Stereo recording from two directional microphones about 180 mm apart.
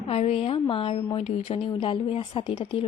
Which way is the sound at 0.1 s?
30° left (ahead or behind).